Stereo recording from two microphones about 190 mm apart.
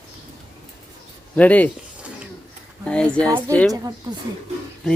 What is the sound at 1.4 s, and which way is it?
Speech, 10° left (ahead or behind).